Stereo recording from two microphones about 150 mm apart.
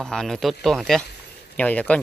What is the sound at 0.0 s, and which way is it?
Speech, 5° left (ahead or behind).